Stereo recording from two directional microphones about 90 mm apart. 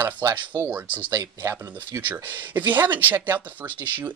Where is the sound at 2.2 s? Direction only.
20° right (ahead or behind).